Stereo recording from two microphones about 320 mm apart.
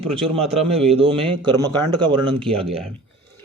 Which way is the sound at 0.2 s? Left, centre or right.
Centre.